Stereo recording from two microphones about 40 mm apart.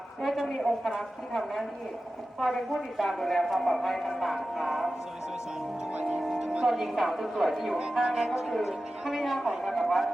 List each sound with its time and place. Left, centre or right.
0.2 s a woman's voice: centre
5.9 s speech: right
6.7 s a man's voice: centre
8.0 s speech: centre
8.4 s a man's voice: centre
9.7 s speech: centre